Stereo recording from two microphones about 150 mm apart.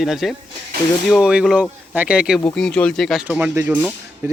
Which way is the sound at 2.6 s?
5° left (ahead or behind).